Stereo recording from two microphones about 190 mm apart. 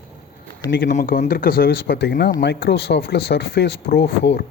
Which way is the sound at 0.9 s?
45° left (ahead or behind).